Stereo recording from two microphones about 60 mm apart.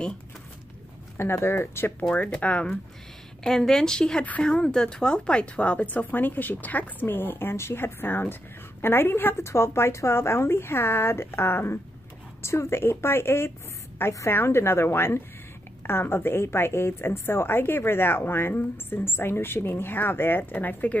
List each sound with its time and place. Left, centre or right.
1.1 s a woman's voice: left
1.9 s speech: left
3.4 s a woman's voice: centre; by 21.0 s left